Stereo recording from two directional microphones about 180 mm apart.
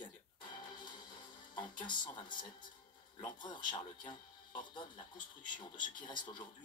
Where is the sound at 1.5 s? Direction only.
25° left (ahead or behind).